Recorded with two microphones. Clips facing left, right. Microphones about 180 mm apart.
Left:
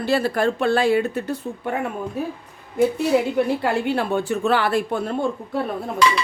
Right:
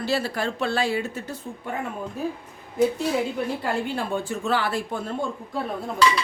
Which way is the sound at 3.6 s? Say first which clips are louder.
Left 5 dB; 70° left (ahead or behind).